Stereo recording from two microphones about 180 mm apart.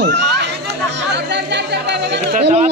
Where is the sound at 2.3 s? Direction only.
40° right (ahead or behind).